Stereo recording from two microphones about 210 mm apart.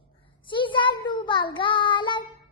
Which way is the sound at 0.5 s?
25° left (ahead or behind).